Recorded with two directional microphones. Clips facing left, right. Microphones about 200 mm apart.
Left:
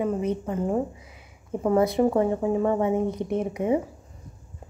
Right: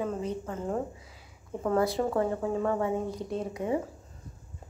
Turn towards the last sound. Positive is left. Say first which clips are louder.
# left 6 dB
turn(degrees=20)  # may be behind; listen again after turning